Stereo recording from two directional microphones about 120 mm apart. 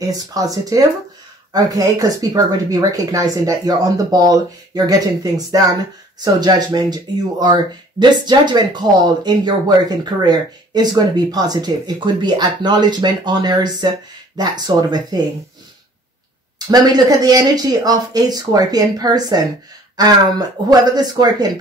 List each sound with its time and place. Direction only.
0.0 s speech: 30° right (ahead or behind)
16.5 s speech: 35° right (ahead or behind)